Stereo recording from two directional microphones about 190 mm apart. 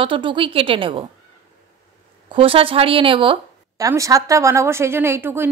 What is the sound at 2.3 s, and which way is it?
Speech, 30° right (ahead or behind).